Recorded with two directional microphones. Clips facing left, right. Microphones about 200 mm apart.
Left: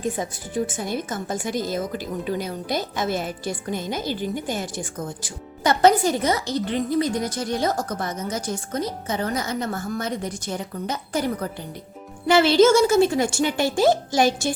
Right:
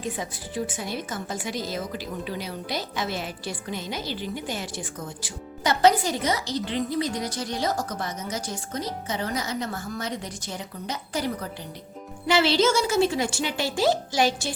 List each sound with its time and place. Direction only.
0.0 s a woman's voice: 50° left (ahead or behind)
12.3 s a woman's voice: 50° left (ahead or behind)